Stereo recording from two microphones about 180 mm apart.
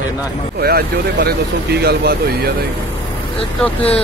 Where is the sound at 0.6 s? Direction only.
60° right (ahead or behind).